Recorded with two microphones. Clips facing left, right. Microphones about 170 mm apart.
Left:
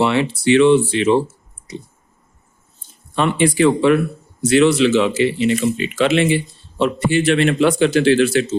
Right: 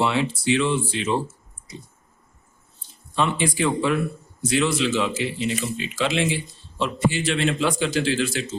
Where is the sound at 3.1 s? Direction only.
60° left (ahead or behind).